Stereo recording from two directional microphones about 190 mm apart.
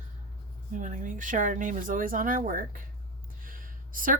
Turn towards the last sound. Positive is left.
turn(degrees=-45)  # may be behind; listen again after turning